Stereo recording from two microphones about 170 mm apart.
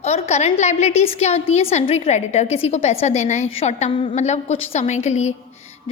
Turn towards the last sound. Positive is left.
turn(degrees=40)  # may be behind; listen again after turning